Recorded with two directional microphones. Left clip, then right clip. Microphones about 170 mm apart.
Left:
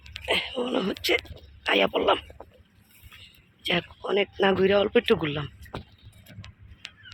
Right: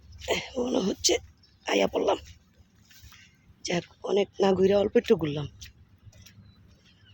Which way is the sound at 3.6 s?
20° right (ahead or behind).